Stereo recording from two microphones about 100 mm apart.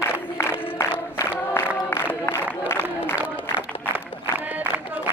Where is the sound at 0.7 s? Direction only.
30° left (ahead or behind).